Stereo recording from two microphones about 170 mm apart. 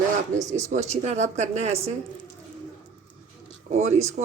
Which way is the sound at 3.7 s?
40° right (ahead or behind).